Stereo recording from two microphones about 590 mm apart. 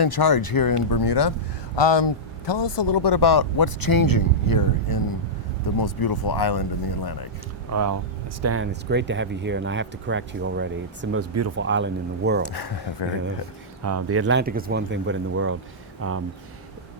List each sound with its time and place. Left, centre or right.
0.0 s a man's voice: left
7.7 s speech: right
12.5 s a man's voice: left
13.8 s speech: right